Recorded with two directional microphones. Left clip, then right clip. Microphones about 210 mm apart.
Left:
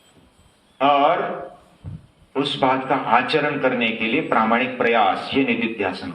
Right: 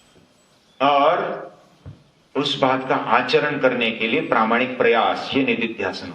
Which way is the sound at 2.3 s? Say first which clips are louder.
Even; 45° right (ahead or behind).